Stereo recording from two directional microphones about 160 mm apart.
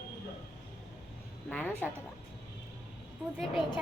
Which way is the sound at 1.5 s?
10° left (ahead or behind).